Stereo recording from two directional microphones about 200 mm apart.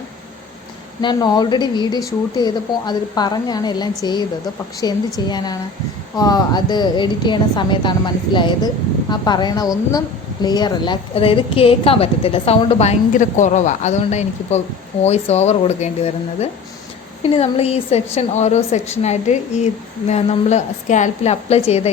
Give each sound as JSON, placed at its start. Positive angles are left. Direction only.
{"t": 1.0, "sound": "a woman's voice", "side_deg": 20}